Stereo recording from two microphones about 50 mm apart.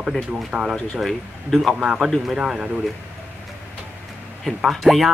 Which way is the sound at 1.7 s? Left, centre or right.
Centre.